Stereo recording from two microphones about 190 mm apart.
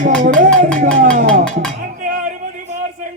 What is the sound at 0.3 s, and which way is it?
Music, 45° right (ahead or behind).